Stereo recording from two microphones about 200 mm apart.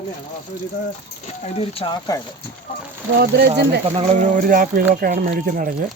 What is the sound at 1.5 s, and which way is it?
Speech, 25° left (ahead or behind).